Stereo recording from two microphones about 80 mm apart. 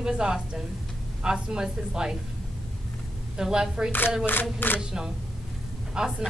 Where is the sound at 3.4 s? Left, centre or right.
Centre.